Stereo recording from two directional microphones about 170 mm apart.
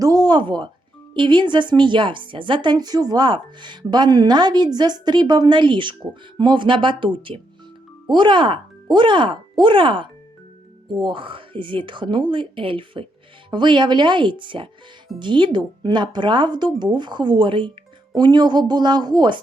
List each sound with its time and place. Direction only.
0.0 s a woman's voice: 25° right (ahead or behind)